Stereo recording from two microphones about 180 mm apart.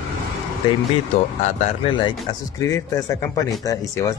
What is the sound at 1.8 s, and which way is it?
Speech, 25° left (ahead or behind).